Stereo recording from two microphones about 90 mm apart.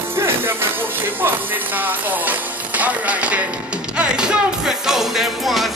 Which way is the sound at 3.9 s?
10° right (ahead or behind).